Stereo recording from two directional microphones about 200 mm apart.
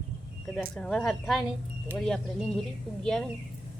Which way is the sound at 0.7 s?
Centre (ahead or behind).